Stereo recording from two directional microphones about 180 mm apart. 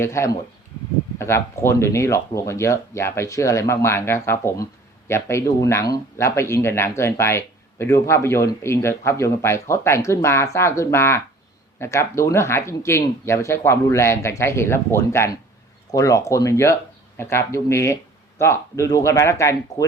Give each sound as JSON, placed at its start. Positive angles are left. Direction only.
{"t": 0.0, "sound": "speech", "side_deg": 15}